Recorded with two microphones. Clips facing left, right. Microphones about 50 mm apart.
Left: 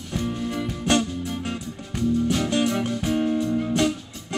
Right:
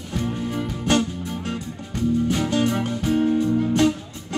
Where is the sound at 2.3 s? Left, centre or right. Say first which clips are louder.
Right 1 dB; centre.